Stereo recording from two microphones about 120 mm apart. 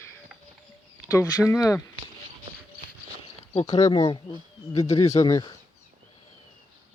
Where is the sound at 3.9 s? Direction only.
45° left (ahead or behind).